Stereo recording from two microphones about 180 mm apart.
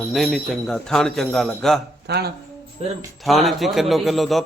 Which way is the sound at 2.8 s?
35° right (ahead or behind).